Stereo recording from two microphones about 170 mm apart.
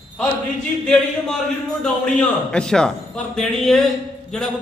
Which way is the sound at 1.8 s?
5° left (ahead or behind).